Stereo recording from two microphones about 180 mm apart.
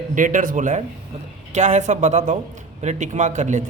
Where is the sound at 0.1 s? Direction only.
45° right (ahead or behind).